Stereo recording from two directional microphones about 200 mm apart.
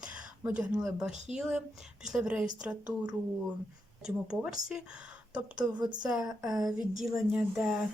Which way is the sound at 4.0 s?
5° right (ahead or behind).